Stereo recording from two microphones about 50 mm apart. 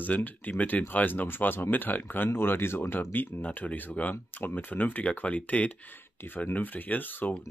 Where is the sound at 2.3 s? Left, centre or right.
Left.